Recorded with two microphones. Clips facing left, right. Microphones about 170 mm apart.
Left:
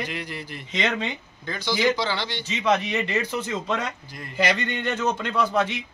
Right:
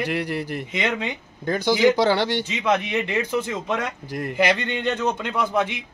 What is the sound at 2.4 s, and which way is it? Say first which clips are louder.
A man's voice: even; 10° right (ahead or behind).